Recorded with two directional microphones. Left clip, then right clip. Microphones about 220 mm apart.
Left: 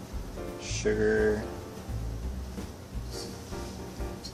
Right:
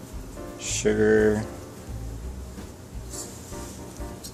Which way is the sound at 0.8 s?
45° right (ahead or behind).